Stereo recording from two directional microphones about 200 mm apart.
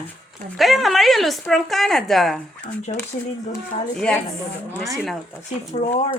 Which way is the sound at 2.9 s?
30° left (ahead or behind).